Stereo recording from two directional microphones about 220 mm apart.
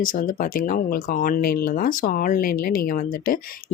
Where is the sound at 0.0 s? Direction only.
40° left (ahead or behind).